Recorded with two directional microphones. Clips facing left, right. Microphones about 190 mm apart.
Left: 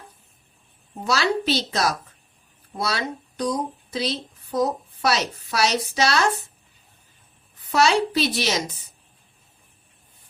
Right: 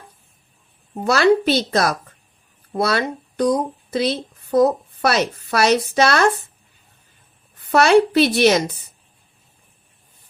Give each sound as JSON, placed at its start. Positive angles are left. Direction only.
{"t": 1.0, "sound": "a woman's voice", "side_deg": -55}
{"t": 7.7, "sound": "a woman's voice", "side_deg": -60}